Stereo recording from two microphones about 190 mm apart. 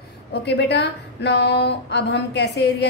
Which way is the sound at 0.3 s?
65° left (ahead or behind).